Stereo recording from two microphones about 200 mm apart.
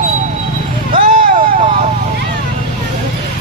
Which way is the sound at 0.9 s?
40° right (ahead or behind).